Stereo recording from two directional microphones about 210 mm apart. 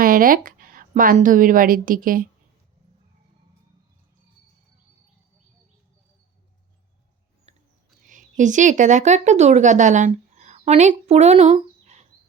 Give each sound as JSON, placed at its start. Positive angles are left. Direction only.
{"t": 0.0, "sound": "a woman's voice", "side_deg": -40}
{"t": 7.5, "sound": "a sound", "side_deg": -30}
{"t": 8.0, "sound": "speech", "side_deg": -35}